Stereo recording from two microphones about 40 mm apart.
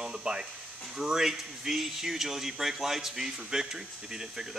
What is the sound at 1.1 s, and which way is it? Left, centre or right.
Speech, centre.